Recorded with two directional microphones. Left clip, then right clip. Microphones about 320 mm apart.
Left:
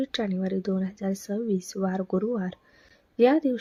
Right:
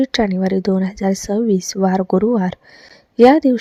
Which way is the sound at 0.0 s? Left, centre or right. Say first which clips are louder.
Right 12 dB; right.